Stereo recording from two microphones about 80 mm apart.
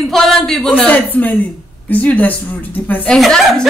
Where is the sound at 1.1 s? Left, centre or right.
Left.